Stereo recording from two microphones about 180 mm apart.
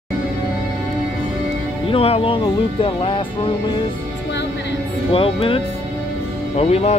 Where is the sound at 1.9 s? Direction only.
30° left (ahead or behind).